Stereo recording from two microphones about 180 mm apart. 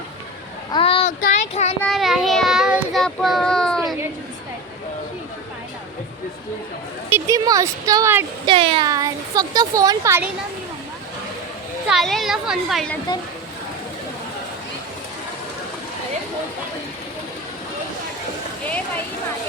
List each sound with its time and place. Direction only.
0.7 s child singing: 30° left (ahead or behind)
1.2 s speech: 40° left (ahead or behind)
1.8 s child singing: centre (ahead or behind)
7.1 s speech: 20° right (ahead or behind)
8.4 s speech: 30° right (ahead or behind)
8.9 s speech: 20° right (ahead or behind)
11.9 s speech: centre (ahead or behind)